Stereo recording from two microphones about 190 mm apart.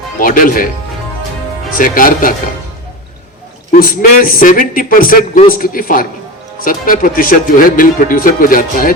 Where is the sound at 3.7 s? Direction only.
50° left (ahead or behind).